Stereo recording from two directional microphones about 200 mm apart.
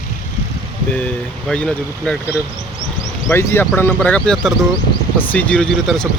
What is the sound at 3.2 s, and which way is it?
Speech, 10° left (ahead or behind).